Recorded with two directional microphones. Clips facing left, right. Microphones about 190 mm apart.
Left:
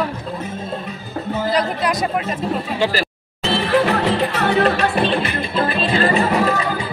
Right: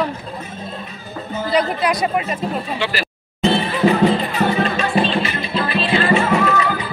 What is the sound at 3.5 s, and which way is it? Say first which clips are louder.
Music: left 2 dB; 75° left (ahead or behind).